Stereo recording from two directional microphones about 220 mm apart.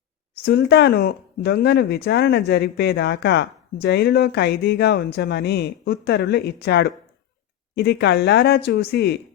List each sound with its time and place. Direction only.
0.4 s speech: 50° left (ahead or behind)